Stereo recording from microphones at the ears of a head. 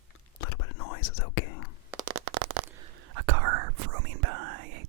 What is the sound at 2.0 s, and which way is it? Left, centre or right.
Whispering, right.